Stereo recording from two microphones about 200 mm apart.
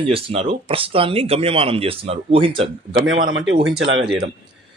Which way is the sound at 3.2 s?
45° right (ahead or behind).